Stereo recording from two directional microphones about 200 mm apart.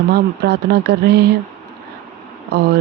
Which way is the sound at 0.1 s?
55° right (ahead or behind).